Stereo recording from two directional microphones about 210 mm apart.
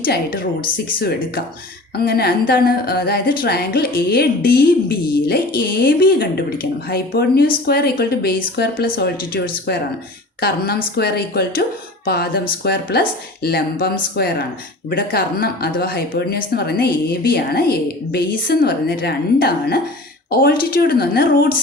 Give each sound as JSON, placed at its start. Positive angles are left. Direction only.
{"t": 0.0, "sound": "a woman's voice", "side_deg": 45}
{"t": 10.9, "sound": "a woman's voice", "side_deg": 50}